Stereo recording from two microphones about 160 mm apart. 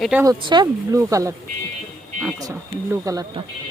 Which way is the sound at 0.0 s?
10° right (ahead or behind).